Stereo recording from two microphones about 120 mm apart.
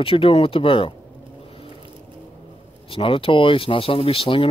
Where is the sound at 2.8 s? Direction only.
50° left (ahead or behind).